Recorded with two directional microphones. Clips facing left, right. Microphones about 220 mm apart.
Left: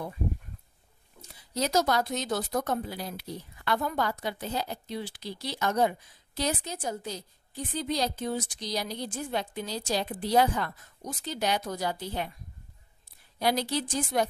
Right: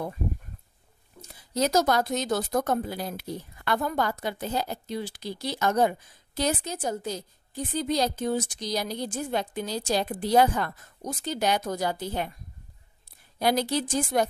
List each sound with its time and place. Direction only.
1.5 s speech: 45° right (ahead or behind)
13.4 s speech: 50° right (ahead or behind)